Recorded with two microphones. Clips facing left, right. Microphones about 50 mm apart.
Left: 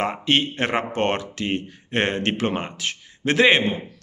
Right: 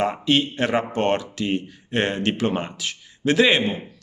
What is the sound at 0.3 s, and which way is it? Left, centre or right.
Speech, left.